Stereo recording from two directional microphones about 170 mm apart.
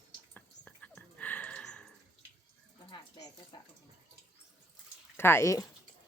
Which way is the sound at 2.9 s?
25° left (ahead or behind).